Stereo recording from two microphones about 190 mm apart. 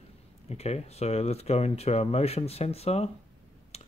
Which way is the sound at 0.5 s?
35° left (ahead or behind).